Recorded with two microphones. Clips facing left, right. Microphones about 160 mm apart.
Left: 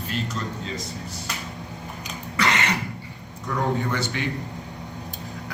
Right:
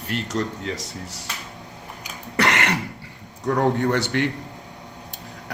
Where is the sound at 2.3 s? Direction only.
65° right (ahead or behind).